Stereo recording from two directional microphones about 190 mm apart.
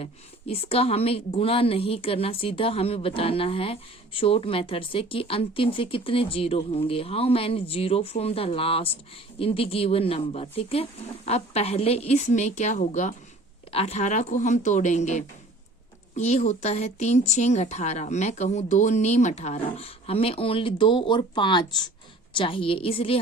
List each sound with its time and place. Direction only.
0.0 s a woman's voice: 30° left (ahead or behind)